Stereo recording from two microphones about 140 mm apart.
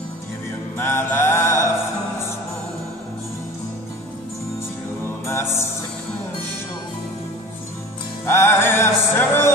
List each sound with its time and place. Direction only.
0.7 s music: 15° left (ahead or behind)
5.0 s music: 15° left (ahead or behind)
8.3 s music: 15° left (ahead or behind)